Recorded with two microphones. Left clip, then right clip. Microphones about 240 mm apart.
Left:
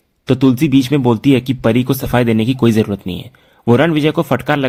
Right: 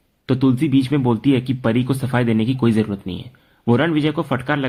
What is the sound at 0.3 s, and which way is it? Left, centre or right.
A man's voice, left.